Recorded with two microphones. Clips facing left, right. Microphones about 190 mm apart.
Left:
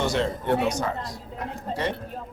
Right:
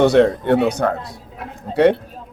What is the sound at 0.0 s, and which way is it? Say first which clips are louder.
A man's voice: right 12 dB; 60° right (ahead or behind).